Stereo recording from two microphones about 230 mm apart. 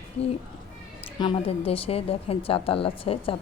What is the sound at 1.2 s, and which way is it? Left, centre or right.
A woman's voice, left.